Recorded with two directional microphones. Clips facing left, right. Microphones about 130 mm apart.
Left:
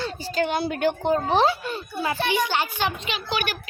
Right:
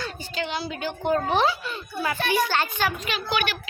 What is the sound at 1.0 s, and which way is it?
A child's voice, 30° left (ahead or behind).